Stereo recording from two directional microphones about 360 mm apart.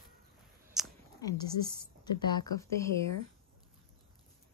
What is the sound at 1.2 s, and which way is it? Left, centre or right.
A woman's voice, centre.